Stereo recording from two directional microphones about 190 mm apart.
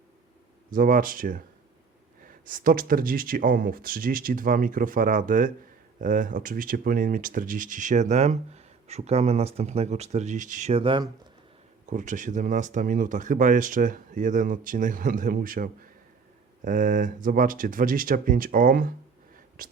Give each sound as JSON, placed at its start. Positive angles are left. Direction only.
{"t": 0.7, "sound": "speech", "side_deg": -45}
{"t": 11.9, "sound": "speech", "side_deg": -40}